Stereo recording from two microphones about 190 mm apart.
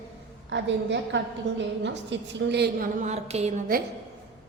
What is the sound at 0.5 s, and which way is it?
A woman's voice, 70° right (ahead or behind).